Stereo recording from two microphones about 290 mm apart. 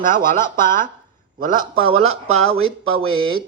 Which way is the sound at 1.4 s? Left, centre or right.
Right.